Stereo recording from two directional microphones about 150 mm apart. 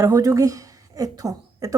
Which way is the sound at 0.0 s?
20° right (ahead or behind).